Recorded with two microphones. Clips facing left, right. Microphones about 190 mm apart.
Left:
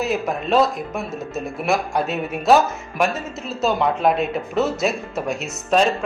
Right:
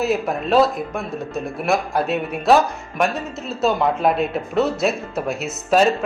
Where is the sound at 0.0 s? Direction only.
Centre (ahead or behind).